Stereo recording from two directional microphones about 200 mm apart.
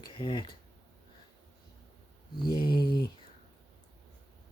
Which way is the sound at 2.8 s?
50° left (ahead or behind).